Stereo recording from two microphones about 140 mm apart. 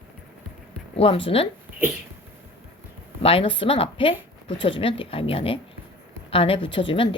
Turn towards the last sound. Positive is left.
turn(degrees=40)  # may be behind; listen again after turning